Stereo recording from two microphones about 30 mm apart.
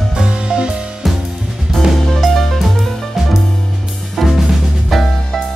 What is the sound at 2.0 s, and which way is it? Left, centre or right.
Music, centre.